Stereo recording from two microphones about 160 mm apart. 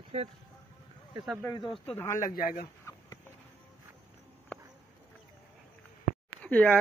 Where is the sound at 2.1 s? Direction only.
60° left (ahead or behind).